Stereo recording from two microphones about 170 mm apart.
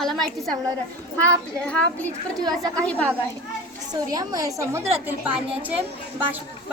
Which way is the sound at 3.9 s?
20° right (ahead or behind).